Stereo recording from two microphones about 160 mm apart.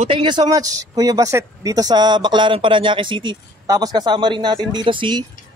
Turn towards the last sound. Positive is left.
turn(degrees=-30)  # may be behind; listen again after turning